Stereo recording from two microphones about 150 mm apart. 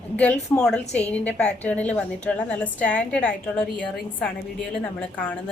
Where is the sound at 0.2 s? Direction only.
10° left (ahead or behind).